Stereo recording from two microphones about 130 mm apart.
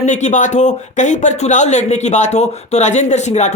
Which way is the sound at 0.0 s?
65° left (ahead or behind).